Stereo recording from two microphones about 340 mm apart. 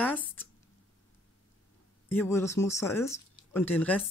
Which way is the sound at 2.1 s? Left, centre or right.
Centre.